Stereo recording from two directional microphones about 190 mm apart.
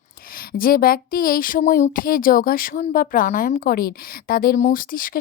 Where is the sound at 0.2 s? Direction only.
50° left (ahead or behind).